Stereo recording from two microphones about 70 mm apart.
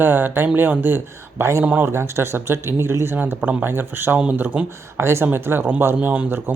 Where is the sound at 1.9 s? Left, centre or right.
Right.